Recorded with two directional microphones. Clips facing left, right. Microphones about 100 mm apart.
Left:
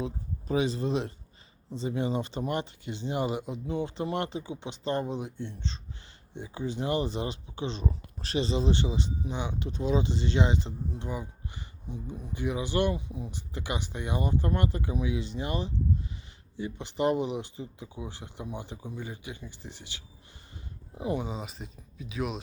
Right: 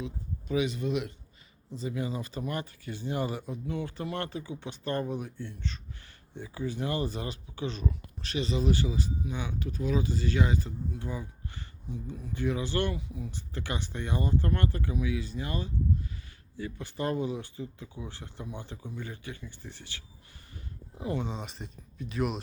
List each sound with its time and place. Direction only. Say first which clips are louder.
0.0 s speech: left 3 dB; 35° left (ahead or behind); by 21.2 s 20° left (ahead or behind)
21.2 s speech: left 1 dB; 5° left (ahead or behind)